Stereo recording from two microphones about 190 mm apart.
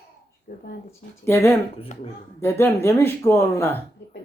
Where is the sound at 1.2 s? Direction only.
10° left (ahead or behind).